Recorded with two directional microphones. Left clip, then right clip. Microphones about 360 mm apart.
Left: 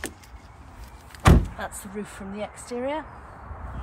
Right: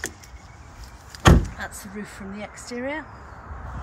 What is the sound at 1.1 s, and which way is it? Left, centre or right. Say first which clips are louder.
Door: right 3 dB; centre.